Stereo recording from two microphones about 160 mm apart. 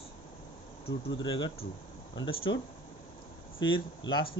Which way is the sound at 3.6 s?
30° left (ahead or behind).